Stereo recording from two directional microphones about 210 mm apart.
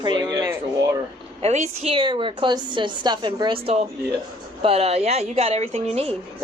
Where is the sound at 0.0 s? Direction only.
20° right (ahead or behind).